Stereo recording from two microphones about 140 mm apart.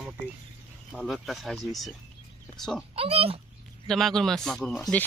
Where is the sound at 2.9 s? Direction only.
45° right (ahead or behind).